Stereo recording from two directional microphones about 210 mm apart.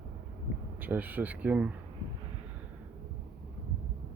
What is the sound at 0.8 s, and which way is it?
Speech, 10° right (ahead or behind).